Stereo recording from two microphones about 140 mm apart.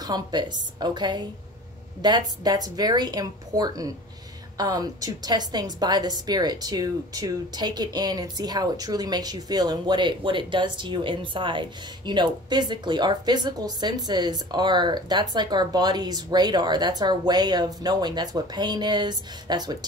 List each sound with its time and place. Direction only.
0.0 s a woman's voice: 30° right (ahead or behind)